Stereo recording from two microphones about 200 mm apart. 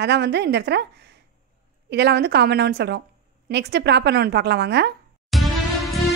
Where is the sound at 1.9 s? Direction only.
55° right (ahead or behind).